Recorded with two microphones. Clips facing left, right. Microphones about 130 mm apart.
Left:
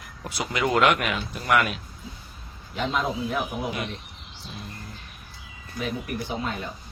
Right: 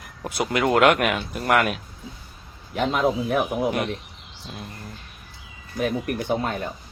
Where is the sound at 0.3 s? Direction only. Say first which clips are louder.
Right 4 dB; 50° right (ahead or behind).